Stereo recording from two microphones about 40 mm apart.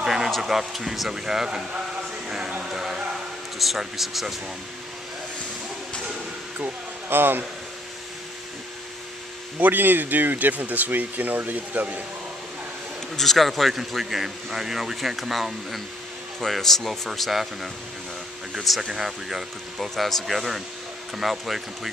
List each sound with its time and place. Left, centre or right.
0.0 s music: centre
0.4 s speech: centre
2.2 s music: centre
3.5 s a man's voice: centre
6.6 s speech: right
9.6 s speech: right
13.1 s a man's voice: centre
17.3 s a man's voice: centre
18.8 s speech: centre
20.0 s a man's voice: centre